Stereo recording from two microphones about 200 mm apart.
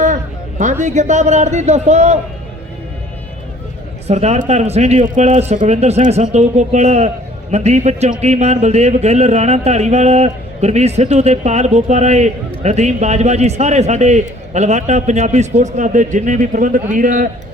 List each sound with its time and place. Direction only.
0.6 s speech: 40° right (ahead or behind)
4.0 s speech: 35° right (ahead or behind)